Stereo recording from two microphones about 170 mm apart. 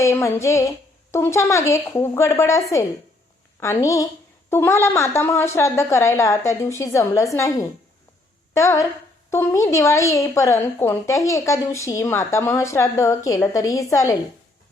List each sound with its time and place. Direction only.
0.0 s a woman's voice: 15° left (ahead or behind)